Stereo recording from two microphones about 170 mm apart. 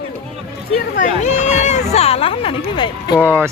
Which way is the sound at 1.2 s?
45° left (ahead or behind).